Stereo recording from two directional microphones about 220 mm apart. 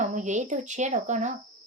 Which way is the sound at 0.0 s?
35° right (ahead or behind).